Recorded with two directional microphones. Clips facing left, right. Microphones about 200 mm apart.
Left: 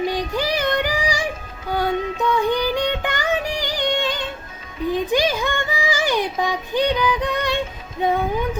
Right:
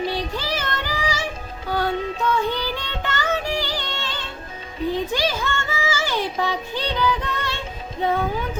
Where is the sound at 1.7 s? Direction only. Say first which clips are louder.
Left 2 dB; 15° left (ahead or behind).